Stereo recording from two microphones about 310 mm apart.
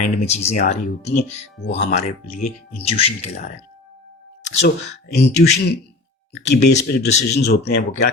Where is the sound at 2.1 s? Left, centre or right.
Left.